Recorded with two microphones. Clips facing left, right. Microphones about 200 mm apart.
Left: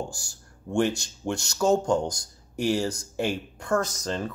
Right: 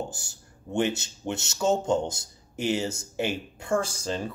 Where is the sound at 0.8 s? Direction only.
5° right (ahead or behind).